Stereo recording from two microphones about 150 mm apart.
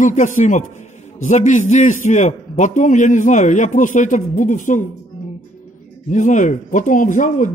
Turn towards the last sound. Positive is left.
turn(degrees=60)  # may be behind; listen again after turning